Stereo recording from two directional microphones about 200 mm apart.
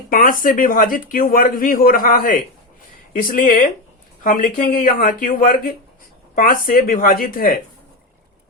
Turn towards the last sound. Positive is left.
turn(degrees=45)  # may be behind; listen again after turning